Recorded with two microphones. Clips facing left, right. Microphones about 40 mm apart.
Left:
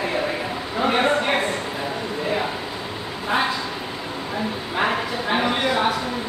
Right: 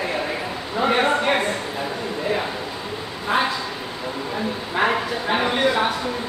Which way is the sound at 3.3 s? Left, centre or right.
Centre.